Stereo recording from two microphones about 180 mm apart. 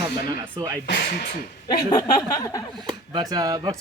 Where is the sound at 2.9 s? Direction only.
20° right (ahead or behind).